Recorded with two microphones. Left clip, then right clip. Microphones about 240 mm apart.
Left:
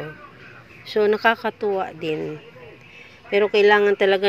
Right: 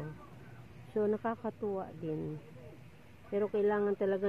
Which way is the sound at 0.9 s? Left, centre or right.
Left.